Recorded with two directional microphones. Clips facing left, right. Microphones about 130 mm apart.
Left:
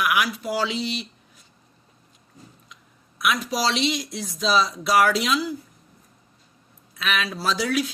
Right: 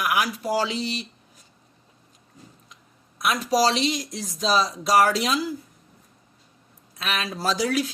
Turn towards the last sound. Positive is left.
turn(degrees=-40)  # may be behind; listen again after turning